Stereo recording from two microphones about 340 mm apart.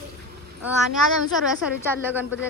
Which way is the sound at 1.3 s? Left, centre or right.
Centre.